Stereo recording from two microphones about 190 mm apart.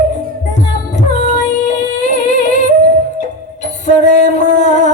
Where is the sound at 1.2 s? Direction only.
40° left (ahead or behind).